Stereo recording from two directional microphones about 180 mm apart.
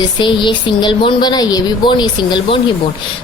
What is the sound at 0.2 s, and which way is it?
A woman's voice, 25° left (ahead or behind).